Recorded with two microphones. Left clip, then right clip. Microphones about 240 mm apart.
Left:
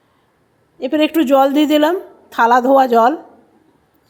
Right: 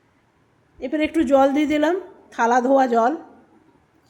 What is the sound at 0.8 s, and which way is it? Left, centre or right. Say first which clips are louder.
A woman's voice: left 6 dB; centre.